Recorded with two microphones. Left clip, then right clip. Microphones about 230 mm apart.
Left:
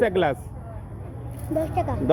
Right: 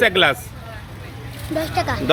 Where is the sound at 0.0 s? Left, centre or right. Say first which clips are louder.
Right 6 dB; centre.